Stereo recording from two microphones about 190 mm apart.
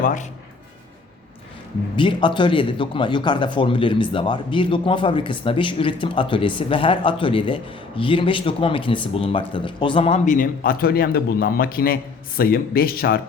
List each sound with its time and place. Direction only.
0.0 s a man's voice: 40° left (ahead or behind)
2.0 s speech: 25° left (ahead or behind)
10.3 s a man's voice: 45° left (ahead or behind)